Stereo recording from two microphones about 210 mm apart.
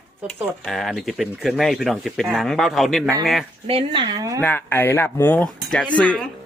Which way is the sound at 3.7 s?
25° right (ahead or behind).